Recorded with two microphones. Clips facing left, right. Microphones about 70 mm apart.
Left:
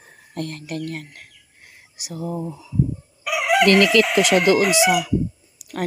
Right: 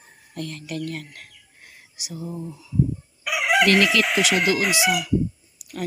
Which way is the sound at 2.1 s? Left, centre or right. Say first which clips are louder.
Left 5 dB; left.